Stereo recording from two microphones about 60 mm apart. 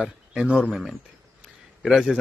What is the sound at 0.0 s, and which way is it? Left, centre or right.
Speech, centre.